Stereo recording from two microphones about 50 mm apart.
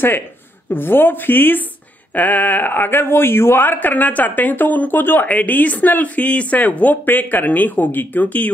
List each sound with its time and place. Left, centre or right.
0.7 s speech: left